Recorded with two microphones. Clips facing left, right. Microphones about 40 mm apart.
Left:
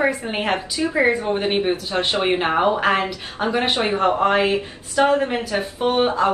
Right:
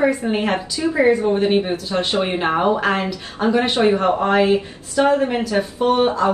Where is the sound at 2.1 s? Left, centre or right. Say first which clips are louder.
Left 2 dB; left.